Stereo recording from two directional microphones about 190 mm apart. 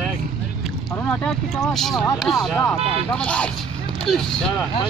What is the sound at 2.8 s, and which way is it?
Speech, 30° right (ahead or behind).